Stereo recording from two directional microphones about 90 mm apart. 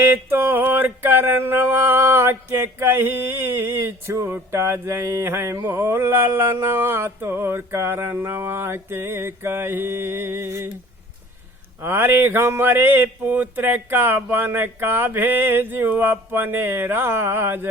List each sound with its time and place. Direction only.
0.0 s mantra: 25° right (ahead or behind)
11.8 s mantra: 25° right (ahead or behind)